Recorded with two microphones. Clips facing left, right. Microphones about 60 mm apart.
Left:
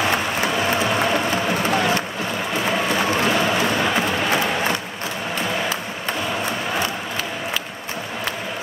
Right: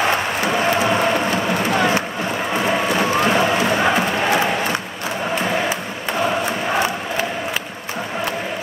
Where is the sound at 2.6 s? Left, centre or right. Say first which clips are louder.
Right 1 dB; centre.